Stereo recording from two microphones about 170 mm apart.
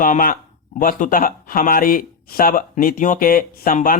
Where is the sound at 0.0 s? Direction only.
55° left (ahead or behind).